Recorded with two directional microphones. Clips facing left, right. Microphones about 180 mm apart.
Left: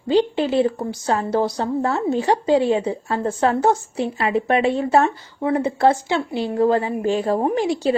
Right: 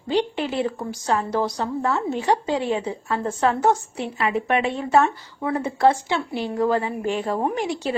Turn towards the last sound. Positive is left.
turn(degrees=35)  # may be behind; listen again after turning